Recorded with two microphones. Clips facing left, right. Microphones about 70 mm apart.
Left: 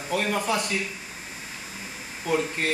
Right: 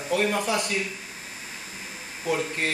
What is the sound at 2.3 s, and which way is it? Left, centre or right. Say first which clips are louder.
Speech: left 1 dB; centre.